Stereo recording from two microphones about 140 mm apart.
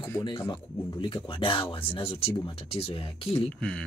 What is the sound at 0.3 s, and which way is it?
Speech, 25° left (ahead or behind).